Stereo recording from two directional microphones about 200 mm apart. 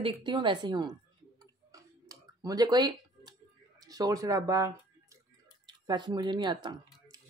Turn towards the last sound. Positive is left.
turn(degrees=-20)  # may be behind; listen again after turning